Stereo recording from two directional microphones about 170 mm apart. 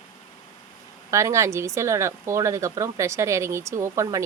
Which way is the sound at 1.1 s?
15° right (ahead or behind).